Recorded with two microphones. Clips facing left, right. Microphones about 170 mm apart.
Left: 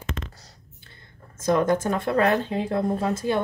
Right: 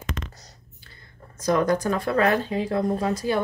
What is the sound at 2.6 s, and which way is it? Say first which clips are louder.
Speech: even; 50° left (ahead or behind).